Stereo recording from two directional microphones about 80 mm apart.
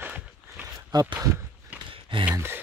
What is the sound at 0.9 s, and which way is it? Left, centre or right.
Speech, right.